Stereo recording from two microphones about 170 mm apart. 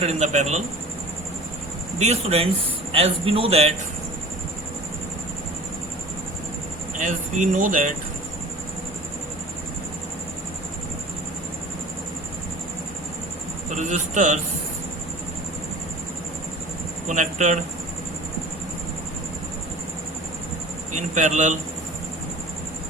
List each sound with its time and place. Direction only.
0.0 s a man's voice: 40° right (ahead or behind)
2.0 s a man's voice: 40° right (ahead or behind)
7.0 s speech: 50° right (ahead or behind)
13.7 s speech: 45° right (ahead or behind)
17.1 s speech: 45° right (ahead or behind)
20.9 s speech: 45° right (ahead or behind)